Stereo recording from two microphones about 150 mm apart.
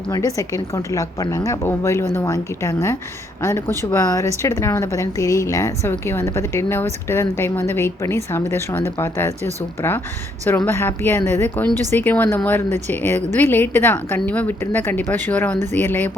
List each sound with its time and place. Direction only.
0.1 s a woman's voice: 20° left (ahead or behind)